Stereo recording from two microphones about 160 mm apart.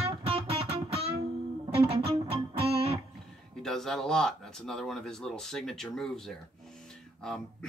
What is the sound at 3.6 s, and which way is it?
Speech, 5° left (ahead or behind).